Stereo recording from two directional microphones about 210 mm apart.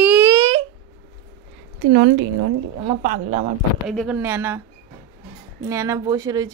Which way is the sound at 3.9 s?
5° right (ahead or behind).